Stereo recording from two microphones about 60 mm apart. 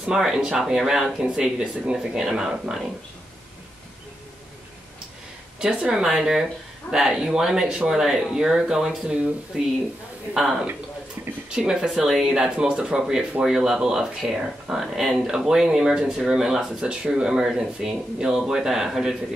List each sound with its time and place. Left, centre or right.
0.0 s speech: centre
5.6 s speech: centre
11.2 s a sound: right
11.5 s speech: centre